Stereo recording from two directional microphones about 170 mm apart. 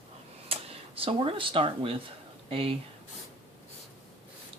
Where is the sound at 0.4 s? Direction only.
35° right (ahead or behind).